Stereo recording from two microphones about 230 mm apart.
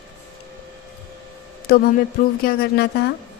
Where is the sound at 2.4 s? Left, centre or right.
Left.